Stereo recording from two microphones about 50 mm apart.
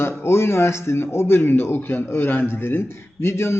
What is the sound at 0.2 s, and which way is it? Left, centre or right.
A man's voice, left.